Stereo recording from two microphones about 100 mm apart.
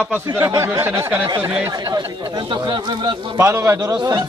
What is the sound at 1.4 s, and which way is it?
Speech, 15° right (ahead or behind).